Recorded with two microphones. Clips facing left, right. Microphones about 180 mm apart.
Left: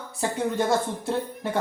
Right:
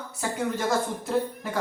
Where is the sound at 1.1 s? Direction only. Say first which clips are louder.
Even; 30° left (ahead or behind).